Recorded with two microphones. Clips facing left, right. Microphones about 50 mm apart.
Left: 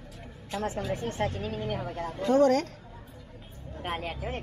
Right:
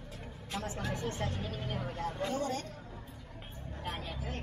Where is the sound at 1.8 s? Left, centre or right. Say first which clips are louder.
Left 3 dB; left.